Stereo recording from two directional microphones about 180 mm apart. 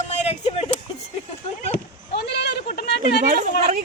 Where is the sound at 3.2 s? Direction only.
50° right (ahead or behind).